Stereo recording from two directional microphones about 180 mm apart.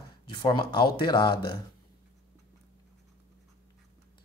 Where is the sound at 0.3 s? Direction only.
25° left (ahead or behind).